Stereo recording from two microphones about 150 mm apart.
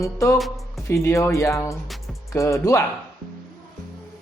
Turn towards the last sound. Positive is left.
turn(degrees=20)  # may be behind; listen again after turning